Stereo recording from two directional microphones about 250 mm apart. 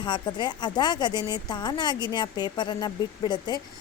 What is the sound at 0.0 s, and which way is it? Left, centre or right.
A woman's voice, centre.